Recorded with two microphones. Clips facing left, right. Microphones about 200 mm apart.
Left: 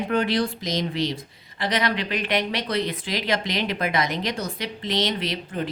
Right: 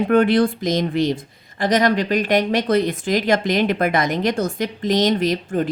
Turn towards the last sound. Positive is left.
turn(degrees=-45)  # may be behind; listen again after turning